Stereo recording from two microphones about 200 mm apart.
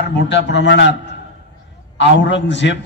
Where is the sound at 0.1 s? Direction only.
60° left (ahead or behind).